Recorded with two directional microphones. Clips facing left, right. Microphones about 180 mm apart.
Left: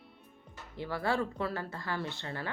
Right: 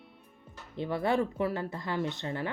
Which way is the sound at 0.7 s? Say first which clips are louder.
Right 4 dB; 20° right (ahead or behind).